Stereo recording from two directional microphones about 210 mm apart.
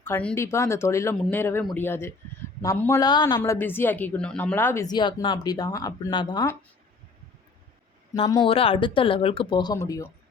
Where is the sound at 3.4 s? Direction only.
10° left (ahead or behind).